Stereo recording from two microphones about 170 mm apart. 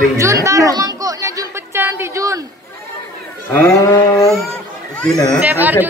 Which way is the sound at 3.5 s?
10° left (ahead or behind).